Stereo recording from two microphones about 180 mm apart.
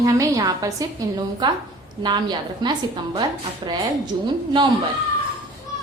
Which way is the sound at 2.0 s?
25° right (ahead or behind).